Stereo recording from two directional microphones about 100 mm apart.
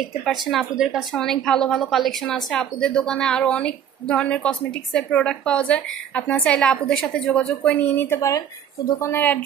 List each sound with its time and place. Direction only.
0.2 s a woman's voice: centre (ahead or behind)
8.0 s speech: 30° left (ahead or behind)
9.1 s a woman's voice: 15° left (ahead or behind)